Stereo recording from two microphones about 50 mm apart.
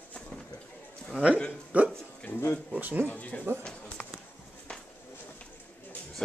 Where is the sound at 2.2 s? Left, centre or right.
Left.